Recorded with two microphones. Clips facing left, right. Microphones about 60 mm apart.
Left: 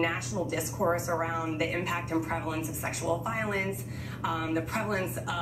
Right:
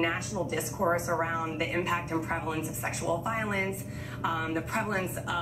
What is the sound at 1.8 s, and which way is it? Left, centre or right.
Speech, centre.